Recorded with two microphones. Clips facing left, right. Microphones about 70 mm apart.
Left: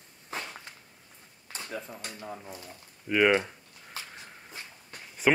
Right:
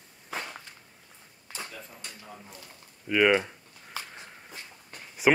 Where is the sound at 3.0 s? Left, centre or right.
Centre.